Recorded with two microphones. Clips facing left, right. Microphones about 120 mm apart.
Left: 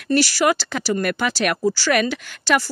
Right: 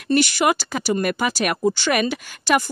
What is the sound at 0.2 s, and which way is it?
Speech, 20° right (ahead or behind).